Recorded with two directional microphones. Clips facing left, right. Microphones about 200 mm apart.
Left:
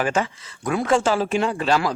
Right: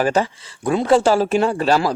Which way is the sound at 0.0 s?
35° right (ahead or behind).